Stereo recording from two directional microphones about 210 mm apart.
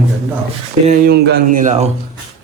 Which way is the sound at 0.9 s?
45° right (ahead or behind).